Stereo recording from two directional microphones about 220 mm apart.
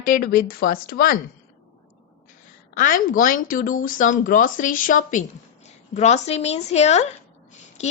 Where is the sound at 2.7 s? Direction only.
35° left (ahead or behind).